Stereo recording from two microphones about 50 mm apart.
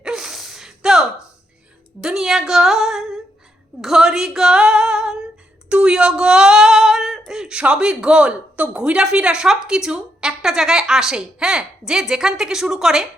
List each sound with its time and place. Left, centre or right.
0.0 s gasp: centre
2.0 s a woman's voice: centre
3.8 s a sound: centre
5.6 s a sound: right
5.9 s speech: centre
8.8 s a woman's voice: centre